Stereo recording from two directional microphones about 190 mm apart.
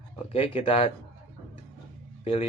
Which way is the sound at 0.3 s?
30° left (ahead or behind).